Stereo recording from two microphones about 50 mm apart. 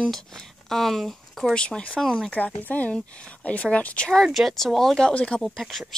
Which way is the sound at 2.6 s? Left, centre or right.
Left.